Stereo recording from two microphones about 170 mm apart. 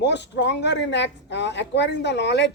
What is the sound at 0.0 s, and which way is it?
Speech, 90° left.